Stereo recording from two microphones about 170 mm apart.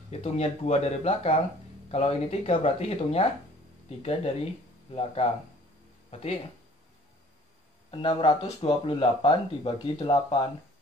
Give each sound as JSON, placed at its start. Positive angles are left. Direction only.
{"t": 0.1, "sound": "speech", "side_deg": 40}
{"t": 6.0, "sound": "music", "side_deg": 35}
{"t": 7.9, "sound": "speech", "side_deg": 30}